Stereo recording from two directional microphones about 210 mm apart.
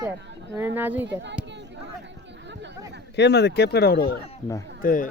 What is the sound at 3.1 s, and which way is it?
Speech, 55° left (ahead or behind).